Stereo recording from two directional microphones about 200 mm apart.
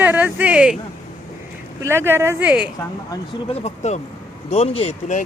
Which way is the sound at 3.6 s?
35° left (ahead or behind).